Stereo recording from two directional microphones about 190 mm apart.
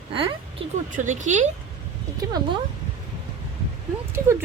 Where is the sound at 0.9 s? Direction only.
40° right (ahead or behind).